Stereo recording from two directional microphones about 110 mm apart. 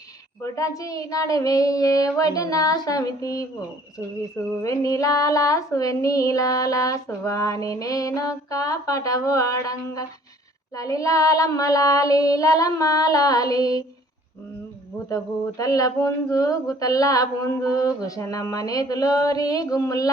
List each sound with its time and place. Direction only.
0.4 s speech: 30° left (ahead or behind)
4.6 s speech: 30° left (ahead or behind)
15.1 s speech: 30° left (ahead or behind)